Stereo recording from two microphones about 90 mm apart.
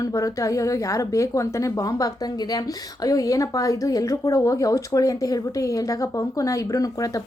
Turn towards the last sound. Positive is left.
turn(degrees=40)  # may be behind; listen again after turning